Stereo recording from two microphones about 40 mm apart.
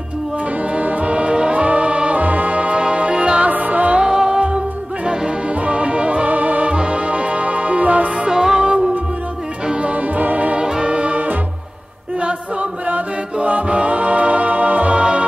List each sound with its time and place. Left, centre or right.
0.7 s music: right
3.4 s music: right
4.0 s music: centre
6.2 s music: right
6.7 s music: right
8.3 s music: centre
8.5 s music: right
10.1 s music: right
10.6 s music: right
12.8 s music: right
15.0 s music: right